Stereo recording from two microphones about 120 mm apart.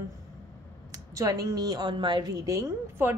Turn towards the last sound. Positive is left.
turn(degrees=-20)  # may be behind; listen again after turning